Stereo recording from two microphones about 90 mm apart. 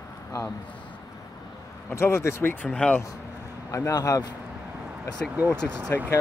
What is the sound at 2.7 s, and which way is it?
Speech, 10° left (ahead or behind).